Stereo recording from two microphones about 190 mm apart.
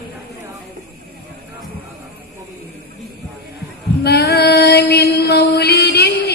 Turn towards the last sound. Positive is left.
turn(degrees=60)  # may be behind; listen again after turning